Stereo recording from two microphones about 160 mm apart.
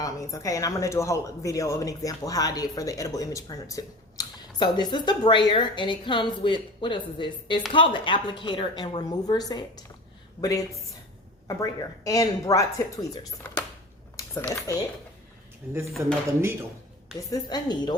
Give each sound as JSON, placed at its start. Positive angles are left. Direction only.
{"t": 0.0, "sound": "speech", "side_deg": 20}
{"t": 11.4, "sound": "speech", "side_deg": 20}
{"t": 15.6, "sound": "speech", "side_deg": -15}
{"t": 17.2, "sound": "speech", "side_deg": 25}